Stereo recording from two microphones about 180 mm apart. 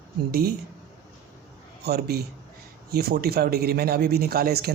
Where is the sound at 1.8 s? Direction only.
60° right (ahead or behind).